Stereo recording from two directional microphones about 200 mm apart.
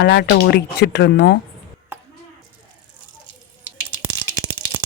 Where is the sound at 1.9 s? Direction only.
10° right (ahead or behind).